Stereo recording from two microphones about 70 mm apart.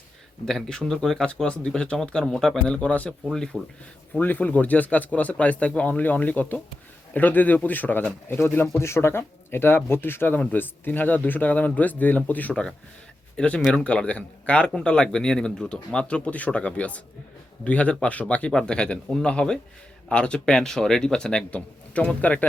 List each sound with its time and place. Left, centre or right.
0.4 s speech: centre
4.2 s speech: left
8.8 s speech: left; by 22.4 s centre